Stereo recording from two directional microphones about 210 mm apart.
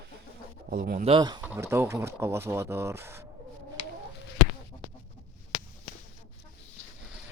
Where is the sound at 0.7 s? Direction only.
40° right (ahead or behind).